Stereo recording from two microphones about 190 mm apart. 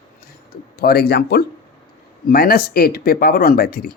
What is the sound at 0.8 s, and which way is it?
Speech, 55° left (ahead or behind).